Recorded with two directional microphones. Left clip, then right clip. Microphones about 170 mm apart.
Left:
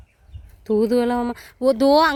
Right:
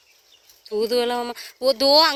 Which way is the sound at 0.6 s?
20° left (ahead or behind).